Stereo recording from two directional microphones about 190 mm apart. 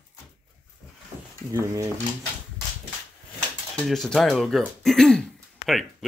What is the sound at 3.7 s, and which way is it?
Speech, centre (ahead or behind).